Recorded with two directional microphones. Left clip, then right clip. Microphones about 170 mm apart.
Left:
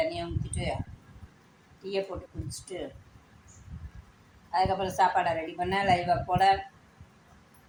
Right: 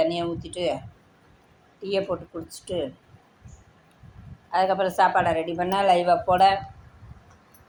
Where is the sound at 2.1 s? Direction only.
25° right (ahead or behind).